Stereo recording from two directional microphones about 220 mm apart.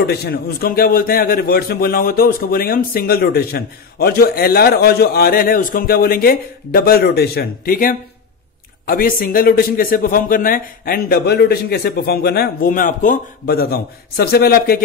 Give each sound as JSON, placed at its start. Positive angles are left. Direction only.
{"t": 0.0, "sound": "a man's voice", "side_deg": 45}